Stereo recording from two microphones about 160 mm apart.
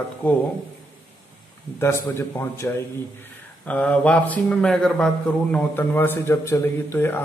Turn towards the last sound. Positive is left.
turn(degrees=15)  # may be behind; listen again after turning